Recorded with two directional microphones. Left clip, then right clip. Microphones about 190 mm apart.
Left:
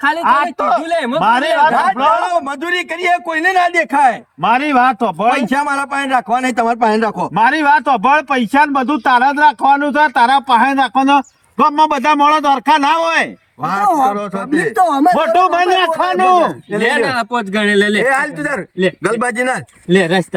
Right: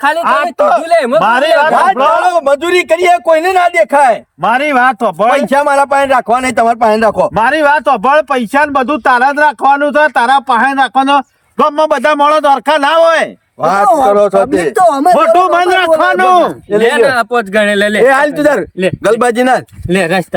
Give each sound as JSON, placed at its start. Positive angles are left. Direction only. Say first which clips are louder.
{"t": 0.0, "sound": "a man's voice", "louder": "right 4 dB", "side_deg": -25}
{"t": 0.3, "sound": "a man's voice", "louder": "right 2 dB", "side_deg": -15}
{"t": 1.7, "sound": "a man's voice", "louder": "right 4 dB", "side_deg": -35}
{"t": 4.4, "sound": "speech", "louder": "right 3 dB", "side_deg": -15}
{"t": 5.5, "sound": "a man's voice", "louder": "right 7 dB", "side_deg": -35}
{"t": 18.0, "sound": "a man's voice", "louder": "right 7 dB", "side_deg": -40}
{"t": 19.9, "sound": "a man's voice", "louder": "right 1 dB", "side_deg": -20}